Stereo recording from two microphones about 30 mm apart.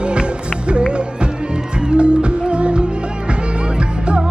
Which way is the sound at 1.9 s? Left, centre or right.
Right.